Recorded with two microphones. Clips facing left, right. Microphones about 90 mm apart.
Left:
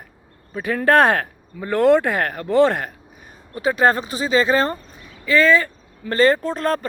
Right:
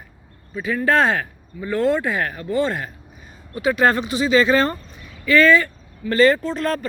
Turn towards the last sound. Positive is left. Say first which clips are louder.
# left 1 dB
turn(degrees=40)  # may be behind; listen again after turning